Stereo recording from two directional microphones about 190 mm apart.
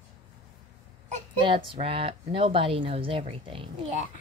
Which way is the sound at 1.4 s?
25° right (ahead or behind).